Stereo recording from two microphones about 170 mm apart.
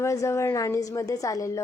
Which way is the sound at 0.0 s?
15° left (ahead or behind).